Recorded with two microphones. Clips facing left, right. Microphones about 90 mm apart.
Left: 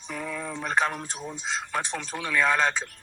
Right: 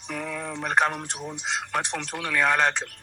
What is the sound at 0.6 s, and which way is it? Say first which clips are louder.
Speech: right 3 dB; 60° right (ahead or behind).